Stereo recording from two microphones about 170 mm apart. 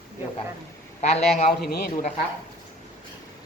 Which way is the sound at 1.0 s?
40° left (ahead or behind).